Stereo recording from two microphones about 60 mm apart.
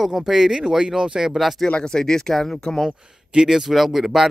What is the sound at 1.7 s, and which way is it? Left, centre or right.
Speech, centre.